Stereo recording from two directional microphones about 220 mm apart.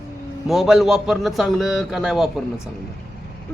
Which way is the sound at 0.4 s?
Centre (ahead or behind).